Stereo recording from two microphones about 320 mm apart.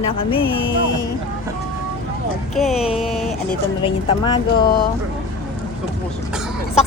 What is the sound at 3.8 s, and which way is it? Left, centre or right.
Speech, centre.